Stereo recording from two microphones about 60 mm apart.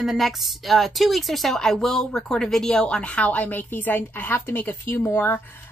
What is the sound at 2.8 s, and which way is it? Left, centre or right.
A woman's voice, left.